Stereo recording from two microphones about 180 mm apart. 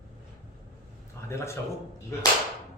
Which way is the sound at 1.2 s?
15° left (ahead or behind).